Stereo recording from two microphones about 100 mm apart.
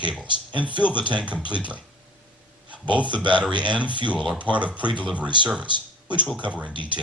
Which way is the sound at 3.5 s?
50° right (ahead or behind).